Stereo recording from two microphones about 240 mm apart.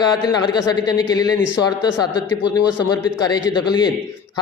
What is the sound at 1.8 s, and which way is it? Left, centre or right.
Speech, left.